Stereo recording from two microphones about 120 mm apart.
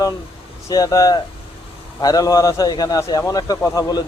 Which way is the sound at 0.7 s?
30° left (ahead or behind).